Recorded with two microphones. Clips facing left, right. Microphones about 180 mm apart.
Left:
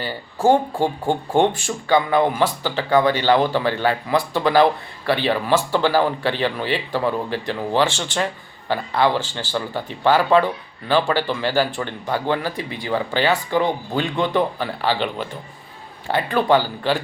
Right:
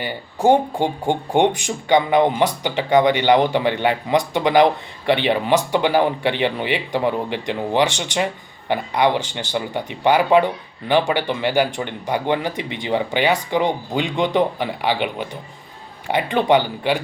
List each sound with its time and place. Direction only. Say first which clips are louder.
0.0 s speech: right 1 dB; 20° right (ahead or behind)